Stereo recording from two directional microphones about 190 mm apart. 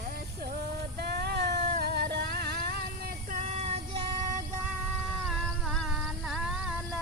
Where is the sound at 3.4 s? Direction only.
35° right (ahead or behind).